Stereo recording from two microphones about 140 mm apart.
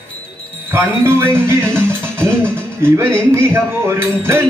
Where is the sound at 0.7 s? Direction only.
15° right (ahead or behind).